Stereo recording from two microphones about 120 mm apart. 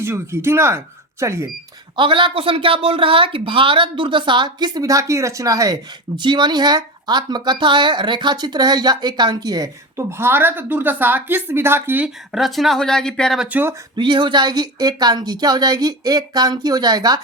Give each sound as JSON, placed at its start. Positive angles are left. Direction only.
{"t": 0.0, "sound": "speech", "side_deg": -20}
{"t": 2.0, "sound": "speech", "side_deg": -45}
{"t": 13.5, "sound": "speech", "side_deg": -15}
{"t": 13.9, "sound": "speech", "side_deg": -40}